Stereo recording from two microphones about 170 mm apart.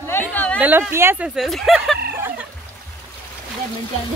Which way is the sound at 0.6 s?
10° right (ahead or behind).